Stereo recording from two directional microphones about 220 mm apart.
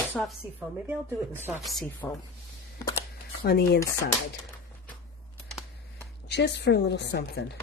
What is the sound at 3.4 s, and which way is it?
Speech, 45° left (ahead or behind).